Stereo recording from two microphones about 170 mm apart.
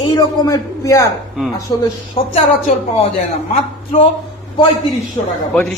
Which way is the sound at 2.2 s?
30° left (ahead or behind).